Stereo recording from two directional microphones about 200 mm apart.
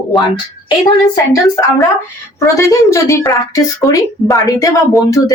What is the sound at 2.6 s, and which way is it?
Speech, 15° left (ahead or behind).